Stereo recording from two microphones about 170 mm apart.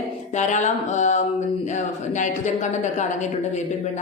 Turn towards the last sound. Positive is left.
turn(degrees=45)  # may be behind; listen again after turning